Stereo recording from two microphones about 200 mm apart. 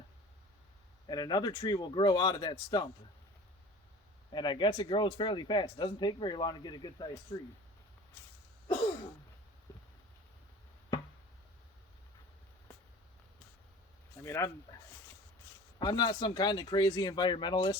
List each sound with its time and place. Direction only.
1.0 s speech: 20° left (ahead or behind)
4.3 s speech: 20° left (ahead or behind)
14.3 s speech: 15° left (ahead or behind)
15.8 s speech: 20° left (ahead or behind)